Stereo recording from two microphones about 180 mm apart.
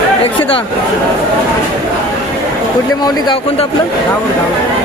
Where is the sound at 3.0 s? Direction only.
25° left (ahead or behind).